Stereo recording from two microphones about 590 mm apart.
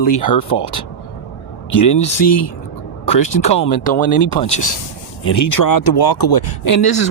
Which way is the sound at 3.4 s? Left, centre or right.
Centre.